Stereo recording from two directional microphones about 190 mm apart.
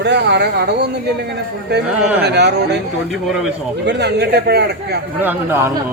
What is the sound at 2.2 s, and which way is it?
Speech, 60° right (ahead or behind).